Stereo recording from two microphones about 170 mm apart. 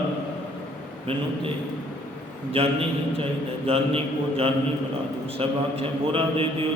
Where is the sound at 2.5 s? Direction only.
35° right (ahead or behind).